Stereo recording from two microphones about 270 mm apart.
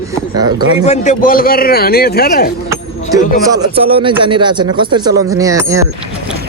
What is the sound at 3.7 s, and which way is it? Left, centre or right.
Speech, right.